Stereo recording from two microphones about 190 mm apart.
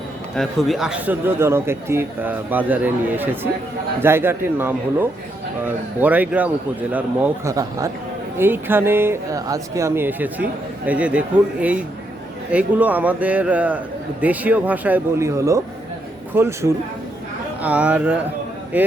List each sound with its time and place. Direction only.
0.3 s a man's voice: centre (ahead or behind)
12.5 s a man's voice: 5° right (ahead or behind)